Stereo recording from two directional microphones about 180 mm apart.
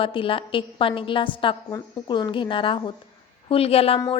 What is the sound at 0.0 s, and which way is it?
A woman's voice, 30° left (ahead or behind).